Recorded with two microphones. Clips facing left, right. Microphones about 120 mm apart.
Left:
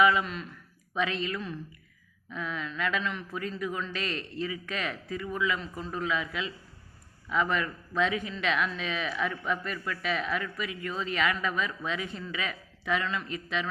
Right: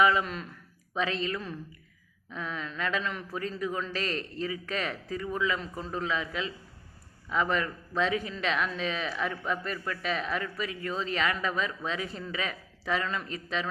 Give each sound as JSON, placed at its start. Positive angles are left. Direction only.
{"t": 0.0, "sound": "a man's voice", "side_deg": -40}